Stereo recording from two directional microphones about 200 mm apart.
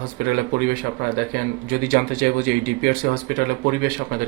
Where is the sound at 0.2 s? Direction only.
50° right (ahead or behind).